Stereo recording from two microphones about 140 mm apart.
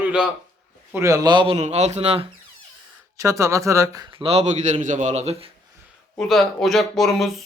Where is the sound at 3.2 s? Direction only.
20° right (ahead or behind).